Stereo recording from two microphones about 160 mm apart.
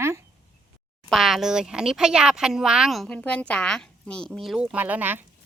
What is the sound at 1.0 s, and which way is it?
A woman's voice, centre (ahead or behind).